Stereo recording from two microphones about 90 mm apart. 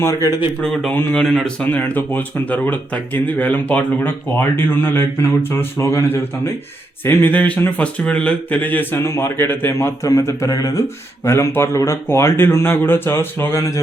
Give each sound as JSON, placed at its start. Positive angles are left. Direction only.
{"t": 0.0, "sound": "speech", "side_deg": 35}
{"t": 0.6, "sound": "speech", "side_deg": 5}
{"t": 1.8, "sound": "speech", "side_deg": 20}
{"t": 9.7, "sound": "speech", "side_deg": 35}
{"t": 11.3, "sound": "speech", "side_deg": 30}